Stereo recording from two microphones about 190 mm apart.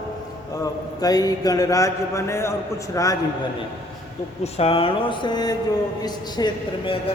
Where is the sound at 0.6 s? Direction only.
20° left (ahead or behind).